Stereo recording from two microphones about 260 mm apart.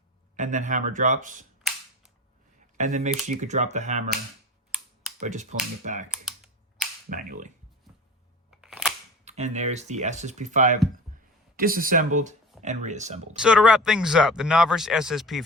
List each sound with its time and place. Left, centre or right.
0.3 s speech: right
2.7 s speech: right
5.2 s speech: right
6.2 s computer keyboard: centre
7.1 s speech: right
8.4 s camera: centre
9.2 s speech: right
13.4 s speech: centre